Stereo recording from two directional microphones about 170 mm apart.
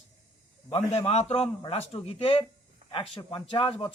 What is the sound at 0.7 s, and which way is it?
Speech, 35° left (ahead or behind).